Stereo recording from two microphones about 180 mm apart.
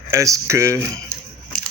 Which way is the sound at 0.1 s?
15° right (ahead or behind).